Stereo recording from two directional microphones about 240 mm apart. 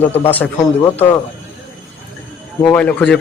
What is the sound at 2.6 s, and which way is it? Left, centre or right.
Speech, centre.